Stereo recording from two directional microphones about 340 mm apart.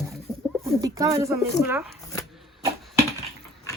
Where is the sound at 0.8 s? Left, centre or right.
Centre.